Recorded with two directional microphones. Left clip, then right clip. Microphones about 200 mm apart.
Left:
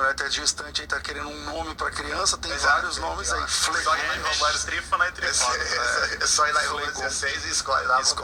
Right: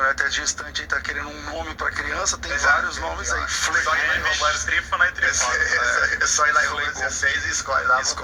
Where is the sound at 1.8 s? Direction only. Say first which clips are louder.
Right 2 dB; 15° left (ahead or behind).